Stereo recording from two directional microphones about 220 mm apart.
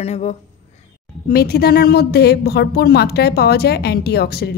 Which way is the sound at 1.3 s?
45° left (ahead or behind).